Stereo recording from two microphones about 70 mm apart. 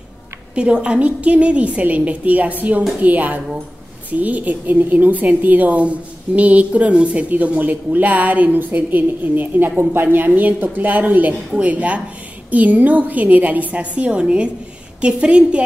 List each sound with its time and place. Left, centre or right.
0.6 s a woman's voice: centre